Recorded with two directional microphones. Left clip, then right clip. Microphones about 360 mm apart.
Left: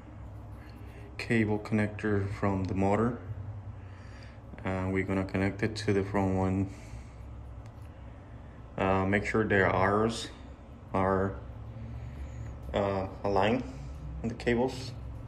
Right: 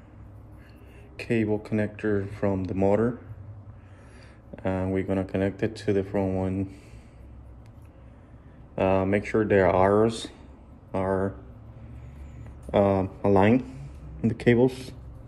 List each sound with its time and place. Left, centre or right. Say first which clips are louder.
1.1 s speech: right 3 dB; centre
4.6 s speech: right 5 dB; centre
8.7 s speech: right 5 dB; centre
12.7 s speech: right 8 dB; centre